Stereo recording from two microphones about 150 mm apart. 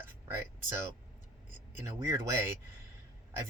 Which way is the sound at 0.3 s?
15° right (ahead or behind).